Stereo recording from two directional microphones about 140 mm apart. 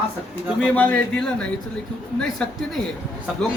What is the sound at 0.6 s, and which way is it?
A man's voice, 10° left (ahead or behind).